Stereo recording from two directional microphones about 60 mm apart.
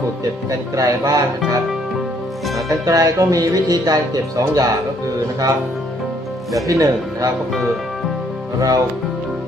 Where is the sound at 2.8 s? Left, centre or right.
Right.